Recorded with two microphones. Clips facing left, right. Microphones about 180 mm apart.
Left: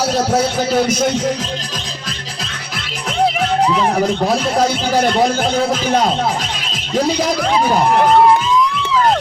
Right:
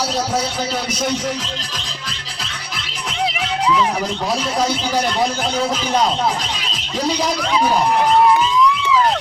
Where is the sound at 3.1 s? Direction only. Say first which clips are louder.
Left 7 dB; 50° left (ahead or behind).